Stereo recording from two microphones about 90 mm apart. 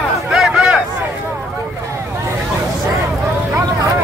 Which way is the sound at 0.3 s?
10° right (ahead or behind).